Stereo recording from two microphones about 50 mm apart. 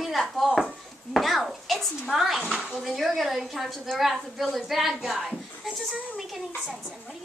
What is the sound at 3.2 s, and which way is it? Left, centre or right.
A woman's voice, centre.